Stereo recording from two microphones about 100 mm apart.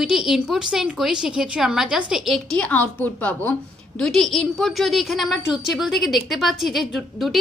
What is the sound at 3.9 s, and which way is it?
A woman's voice, 5° left (ahead or behind).